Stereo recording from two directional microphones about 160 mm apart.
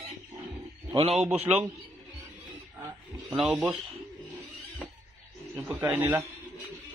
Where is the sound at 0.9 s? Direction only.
40° right (ahead or behind).